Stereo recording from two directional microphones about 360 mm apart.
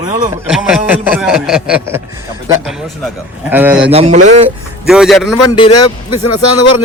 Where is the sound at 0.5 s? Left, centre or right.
Centre.